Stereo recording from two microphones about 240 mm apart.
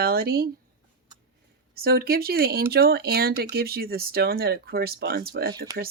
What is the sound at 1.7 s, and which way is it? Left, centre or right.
Speech, right.